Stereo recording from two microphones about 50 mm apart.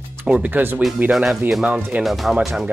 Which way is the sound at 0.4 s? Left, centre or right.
Right.